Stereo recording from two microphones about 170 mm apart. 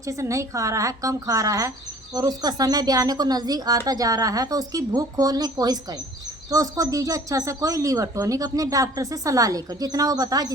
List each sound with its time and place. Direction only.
0.0 s speech: 20° right (ahead or behind)